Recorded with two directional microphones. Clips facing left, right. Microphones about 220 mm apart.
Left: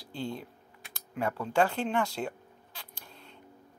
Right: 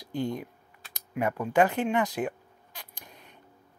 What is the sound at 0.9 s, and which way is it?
Bleat, 15° right (ahead or behind).